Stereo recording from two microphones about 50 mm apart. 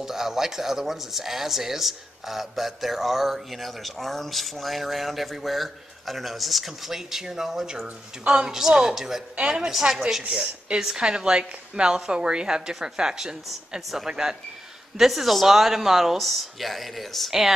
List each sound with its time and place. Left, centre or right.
0.0 s a woman's voice: centre